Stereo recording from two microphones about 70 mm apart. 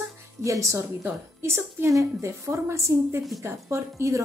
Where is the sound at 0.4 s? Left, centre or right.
Right.